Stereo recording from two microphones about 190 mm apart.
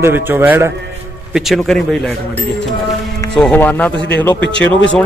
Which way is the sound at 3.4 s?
10° left (ahead or behind).